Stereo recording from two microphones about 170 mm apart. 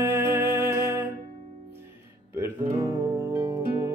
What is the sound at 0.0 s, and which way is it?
Music, 15° right (ahead or behind).